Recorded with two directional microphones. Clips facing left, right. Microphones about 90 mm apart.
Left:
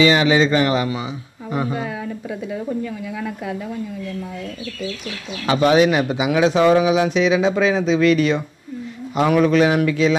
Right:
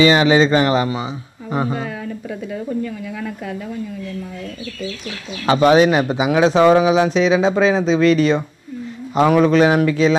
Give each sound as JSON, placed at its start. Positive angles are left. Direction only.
{"t": 0.0, "sound": "speech", "side_deg": -35}
{"t": 1.8, "sound": "speech", "side_deg": 10}
{"t": 5.4, "sound": "speech", "side_deg": -35}